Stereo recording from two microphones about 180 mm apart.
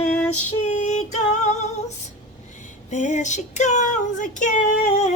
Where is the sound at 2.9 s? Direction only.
40° left (ahead or behind).